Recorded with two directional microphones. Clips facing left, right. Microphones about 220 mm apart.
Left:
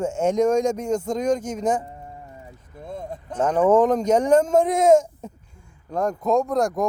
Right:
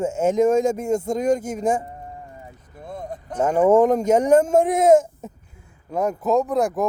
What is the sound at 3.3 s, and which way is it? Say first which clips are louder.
A man's voice: right 2 dB; 10° right (ahead or behind).